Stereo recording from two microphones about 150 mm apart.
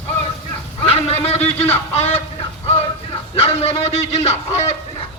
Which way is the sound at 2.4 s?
45° left (ahead or behind).